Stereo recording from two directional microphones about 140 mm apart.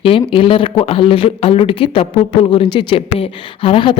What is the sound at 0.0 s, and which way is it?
Speech, 40° left (ahead or behind).